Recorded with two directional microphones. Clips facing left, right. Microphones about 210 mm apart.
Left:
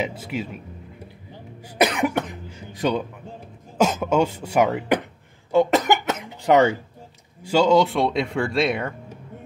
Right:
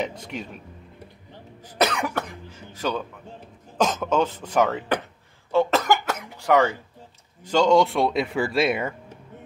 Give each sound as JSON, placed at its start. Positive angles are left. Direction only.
{"t": 0.0, "sound": "speech", "side_deg": 5}
{"t": 1.8, "sound": "cough", "side_deg": 15}
{"t": 7.4, "sound": "speech", "side_deg": 5}